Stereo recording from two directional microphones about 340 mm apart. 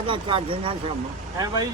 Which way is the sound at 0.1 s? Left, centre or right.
Centre.